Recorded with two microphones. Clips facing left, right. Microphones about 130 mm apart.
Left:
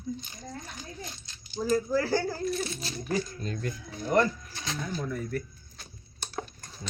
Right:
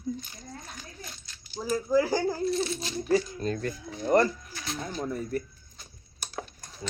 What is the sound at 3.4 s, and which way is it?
Speech, 40° right (ahead or behind).